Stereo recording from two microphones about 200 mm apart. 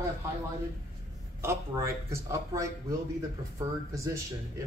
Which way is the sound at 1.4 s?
15° right (ahead or behind).